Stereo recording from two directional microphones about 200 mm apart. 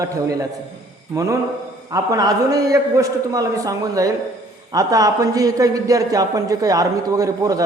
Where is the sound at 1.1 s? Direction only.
15° right (ahead or behind).